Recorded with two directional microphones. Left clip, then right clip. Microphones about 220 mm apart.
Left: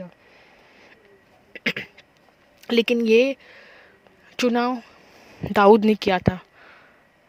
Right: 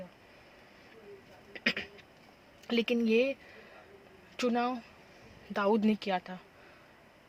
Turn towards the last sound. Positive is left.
turn(degrees=45)  # may be behind; listen again after turning